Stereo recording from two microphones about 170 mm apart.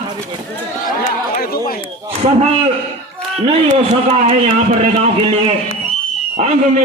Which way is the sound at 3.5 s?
35° right (ahead or behind).